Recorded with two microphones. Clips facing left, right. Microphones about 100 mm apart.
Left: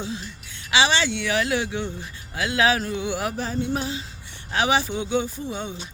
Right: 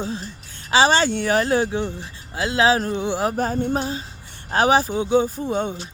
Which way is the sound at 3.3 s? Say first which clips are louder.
Right 4 dB; 45° right (ahead or behind).